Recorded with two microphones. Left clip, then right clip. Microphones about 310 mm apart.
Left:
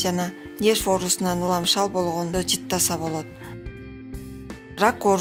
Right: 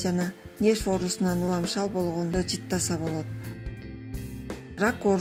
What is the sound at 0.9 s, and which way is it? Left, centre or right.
Speech, left.